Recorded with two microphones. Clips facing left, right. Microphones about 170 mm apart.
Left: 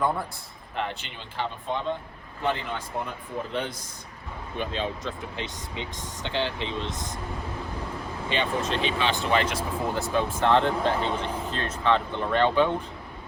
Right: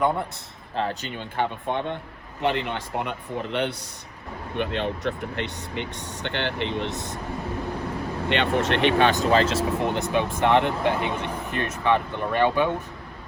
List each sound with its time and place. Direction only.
0.8 s speech: 40° right (ahead or behind); by 2.0 s 60° right (ahead or behind)
2.4 s speech: 70° right (ahead or behind)
8.3 s speech: 70° right (ahead or behind); by 9.6 s 30° right (ahead or behind)
9.9 s speech: 20° right (ahead or behind)